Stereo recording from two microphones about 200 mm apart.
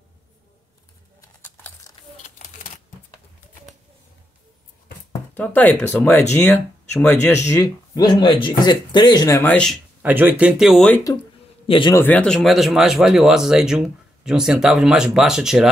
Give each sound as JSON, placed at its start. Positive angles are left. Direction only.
{"t": 1.2, "sound": "crumpling", "side_deg": 15}
{"t": 2.2, "sound": "shuffling cards", "side_deg": 35}
{"t": 5.3, "sound": "speech", "side_deg": 10}
{"t": 9.5, "sound": "speech", "side_deg": 5}
{"t": 10.0, "sound": "speech", "side_deg": -10}
{"t": 11.6, "sound": "a man's voice", "side_deg": 25}
{"t": 12.0, "sound": "speech", "side_deg": 5}